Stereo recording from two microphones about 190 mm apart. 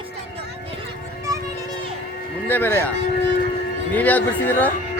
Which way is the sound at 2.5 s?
10° left (ahead or behind).